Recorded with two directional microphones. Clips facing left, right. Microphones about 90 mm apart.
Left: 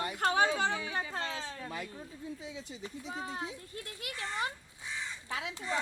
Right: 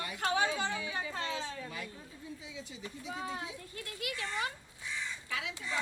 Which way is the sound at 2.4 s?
35° left (ahead or behind).